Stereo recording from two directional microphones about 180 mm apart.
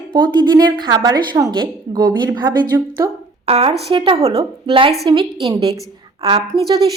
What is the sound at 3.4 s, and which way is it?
A woman's voice, 35° right (ahead or behind).